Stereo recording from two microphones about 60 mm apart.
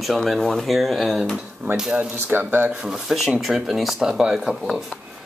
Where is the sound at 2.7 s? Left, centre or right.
Centre.